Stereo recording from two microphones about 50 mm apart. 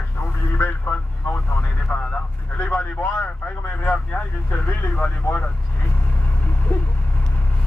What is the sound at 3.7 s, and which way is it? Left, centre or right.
Vehicle, left.